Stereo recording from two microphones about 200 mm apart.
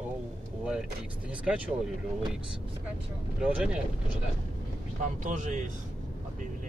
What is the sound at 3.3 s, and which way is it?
Speech, 5° right (ahead or behind).